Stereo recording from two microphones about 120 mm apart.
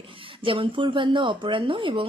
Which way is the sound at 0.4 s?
45° right (ahead or behind).